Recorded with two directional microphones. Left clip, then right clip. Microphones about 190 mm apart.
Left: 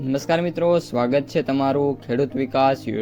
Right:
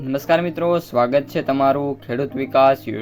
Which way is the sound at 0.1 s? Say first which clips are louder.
Right 3 dB; 30° left (ahead or behind).